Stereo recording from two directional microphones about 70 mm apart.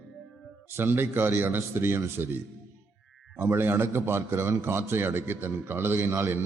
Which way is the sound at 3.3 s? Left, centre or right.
Right.